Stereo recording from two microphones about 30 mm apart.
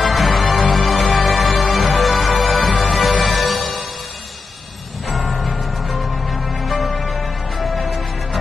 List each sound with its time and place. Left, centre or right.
0.0 s music: centre
5.3 s music: centre